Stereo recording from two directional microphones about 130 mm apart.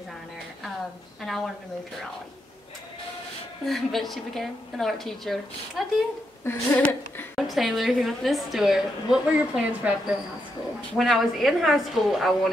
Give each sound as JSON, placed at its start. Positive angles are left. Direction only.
{"t": 1.2, "sound": "a woman's voice", "side_deg": 0}
{"t": 3.6, "sound": "a woman's voice", "side_deg": 0}
{"t": 6.5, "sound": "a woman's voice", "side_deg": 20}
{"t": 7.3, "sound": "a woman's voice", "side_deg": 0}